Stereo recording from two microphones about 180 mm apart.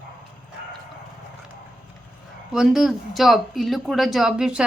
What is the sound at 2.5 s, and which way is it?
Speech, centre (ahead or behind).